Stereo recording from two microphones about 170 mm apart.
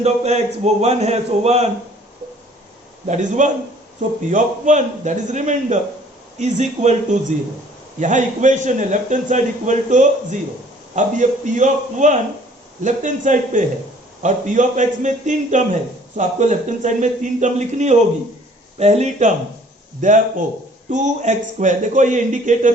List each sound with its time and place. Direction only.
0.0 s a man's voice: 40° right (ahead or behind)
3.1 s a man's voice: 45° right (ahead or behind)